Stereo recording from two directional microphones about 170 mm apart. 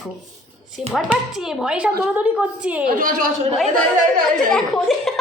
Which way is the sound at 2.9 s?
50° right (ahead or behind).